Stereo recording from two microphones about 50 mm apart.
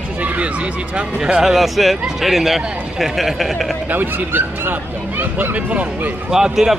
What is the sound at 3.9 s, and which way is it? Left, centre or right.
Speech, right.